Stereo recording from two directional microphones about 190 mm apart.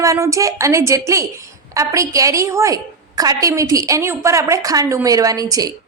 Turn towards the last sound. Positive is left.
turn(degrees=-20)  # may be behind; listen again after turning